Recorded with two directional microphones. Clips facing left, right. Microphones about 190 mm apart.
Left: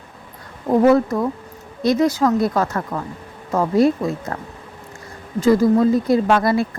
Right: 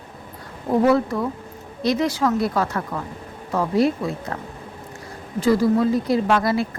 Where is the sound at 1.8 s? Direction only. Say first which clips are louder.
Left 4 dB; 45° left (ahead or behind).